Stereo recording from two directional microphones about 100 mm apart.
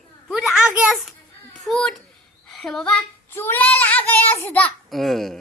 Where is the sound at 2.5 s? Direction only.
5° left (ahead or behind).